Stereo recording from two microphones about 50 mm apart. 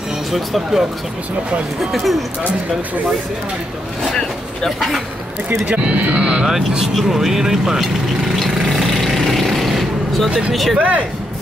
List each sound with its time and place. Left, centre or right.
0.3 s speech: centre
4.6 s speech: centre
5.7 s speech: right
7.0 s speech: centre
8.4 s vehicle: centre
10.5 s speech: centre
10.8 s speech: right